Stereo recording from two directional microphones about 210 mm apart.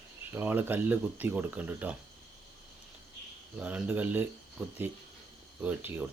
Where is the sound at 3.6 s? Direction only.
5° right (ahead or behind).